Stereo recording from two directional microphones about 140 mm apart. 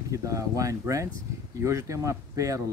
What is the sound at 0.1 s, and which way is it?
Speech, 20° right (ahead or behind).